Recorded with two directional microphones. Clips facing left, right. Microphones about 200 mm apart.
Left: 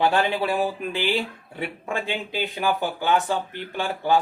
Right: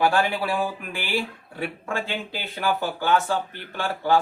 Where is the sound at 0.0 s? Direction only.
25° left (ahead or behind).